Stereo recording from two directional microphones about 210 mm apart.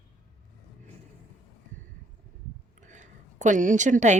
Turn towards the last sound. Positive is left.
turn(degrees=-35)  # may be behind; listen again after turning